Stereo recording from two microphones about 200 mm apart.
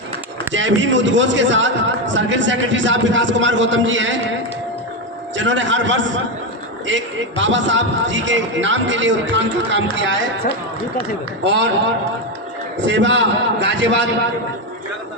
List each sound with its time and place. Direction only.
0.5 s a man's voice: 70° right (ahead or behind)
5.4 s a man's voice: 70° right (ahead or behind)
11.4 s a man's voice: 65° right (ahead or behind)
12.8 s a man's voice: 65° right (ahead or behind)